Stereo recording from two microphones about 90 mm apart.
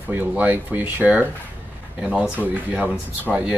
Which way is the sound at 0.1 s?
20° right (ahead or behind).